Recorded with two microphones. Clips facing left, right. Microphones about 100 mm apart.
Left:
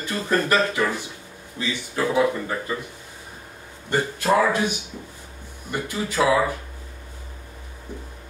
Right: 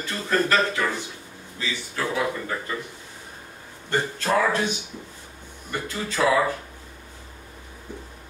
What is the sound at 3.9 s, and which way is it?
Speech, 15° left (ahead or behind).